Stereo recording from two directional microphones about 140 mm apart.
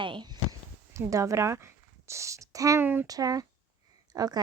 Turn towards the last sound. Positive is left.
turn(degrees=-30)  # may be behind; listen again after turning